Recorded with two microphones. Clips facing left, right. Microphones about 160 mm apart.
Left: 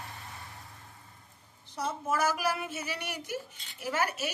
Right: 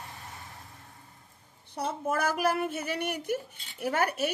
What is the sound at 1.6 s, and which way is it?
Speech, 55° right (ahead or behind).